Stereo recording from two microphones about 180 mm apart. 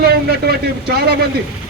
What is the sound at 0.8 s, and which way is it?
Speech, 60° right (ahead or behind).